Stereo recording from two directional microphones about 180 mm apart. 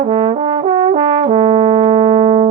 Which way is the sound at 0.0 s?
30° right (ahead or behind).